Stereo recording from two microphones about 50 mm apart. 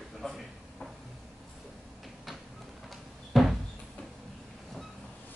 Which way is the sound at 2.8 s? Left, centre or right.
Centre.